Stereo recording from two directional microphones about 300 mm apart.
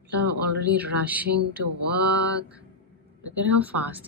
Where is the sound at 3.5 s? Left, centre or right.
Centre.